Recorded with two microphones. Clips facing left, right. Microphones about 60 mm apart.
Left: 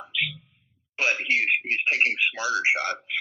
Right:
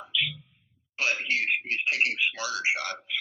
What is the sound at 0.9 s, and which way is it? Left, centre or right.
Speech, left.